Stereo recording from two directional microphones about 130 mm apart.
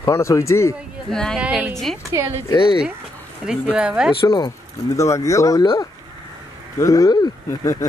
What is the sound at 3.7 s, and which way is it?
Speech, 10° right (ahead or behind).